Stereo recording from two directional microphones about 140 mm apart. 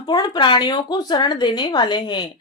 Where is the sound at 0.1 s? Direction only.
30° left (ahead or behind).